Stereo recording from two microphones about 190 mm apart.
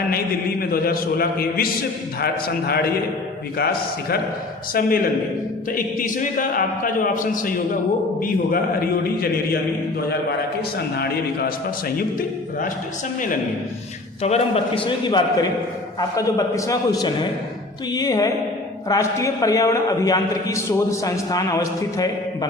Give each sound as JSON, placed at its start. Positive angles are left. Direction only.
{"t": 0.6, "sound": "a man's voice", "side_deg": 50}
{"t": 10.8, "sound": "a man's voice", "side_deg": 55}
{"t": 14.2, "sound": "a man's voice", "side_deg": 35}